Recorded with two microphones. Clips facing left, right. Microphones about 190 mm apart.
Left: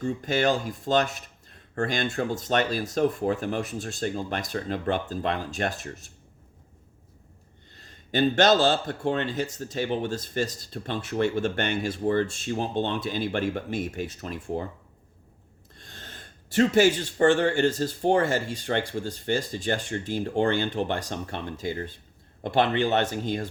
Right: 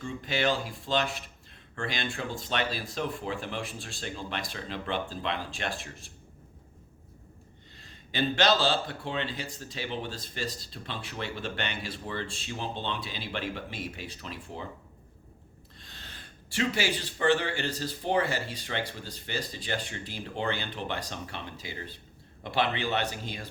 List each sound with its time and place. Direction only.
0.0 s speech: 45° left (ahead or behind)
7.8 s speech: 45° left (ahead or behind)
15.8 s speech: 45° left (ahead or behind)